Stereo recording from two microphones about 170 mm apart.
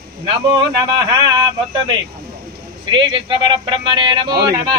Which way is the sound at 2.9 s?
30° right (ahead or behind).